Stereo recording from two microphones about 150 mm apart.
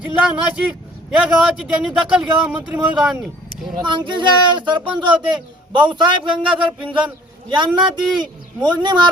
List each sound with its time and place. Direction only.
0.2 s a man's voice: 5° right (ahead or behind)
3.8 s speech: 30° right (ahead or behind)